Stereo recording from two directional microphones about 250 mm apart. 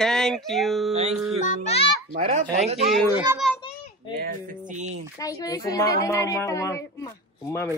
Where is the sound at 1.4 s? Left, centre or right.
Left.